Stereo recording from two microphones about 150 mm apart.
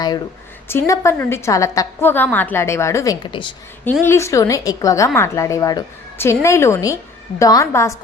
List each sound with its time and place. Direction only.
0.7 s a woman's voice: 15° left (ahead or behind)
4.0 s a woman's voice: 20° left (ahead or behind)